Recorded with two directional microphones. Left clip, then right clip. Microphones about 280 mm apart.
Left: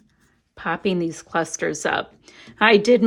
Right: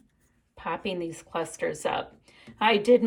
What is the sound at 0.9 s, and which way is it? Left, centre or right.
Speech, left.